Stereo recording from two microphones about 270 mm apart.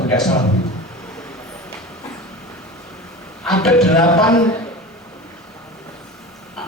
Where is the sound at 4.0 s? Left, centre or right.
Centre.